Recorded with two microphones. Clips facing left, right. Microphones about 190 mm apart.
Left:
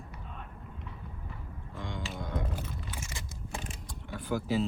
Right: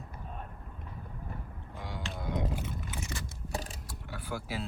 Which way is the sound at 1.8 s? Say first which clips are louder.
Left 2 dB; centre (ahead or behind).